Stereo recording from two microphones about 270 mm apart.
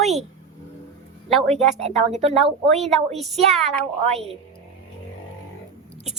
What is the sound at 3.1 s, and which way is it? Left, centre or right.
Speech, centre.